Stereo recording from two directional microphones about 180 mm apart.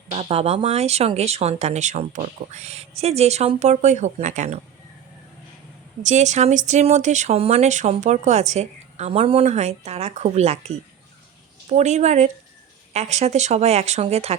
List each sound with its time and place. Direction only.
0.1 s speech: 35° right (ahead or behind)
6.0 s speech: 40° right (ahead or behind)